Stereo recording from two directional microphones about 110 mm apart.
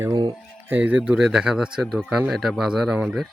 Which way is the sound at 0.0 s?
35° right (ahead or behind).